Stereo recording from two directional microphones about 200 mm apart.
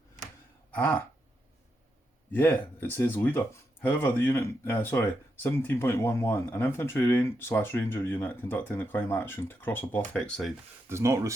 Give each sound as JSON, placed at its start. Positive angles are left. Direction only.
{"t": 0.7, "sound": "a sound", "side_deg": 10}
{"t": 2.3, "sound": "speech", "side_deg": 10}
{"t": 10.8, "sound": "speech", "side_deg": -15}